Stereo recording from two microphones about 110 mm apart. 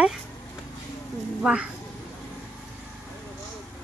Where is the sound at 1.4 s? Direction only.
10° right (ahead or behind).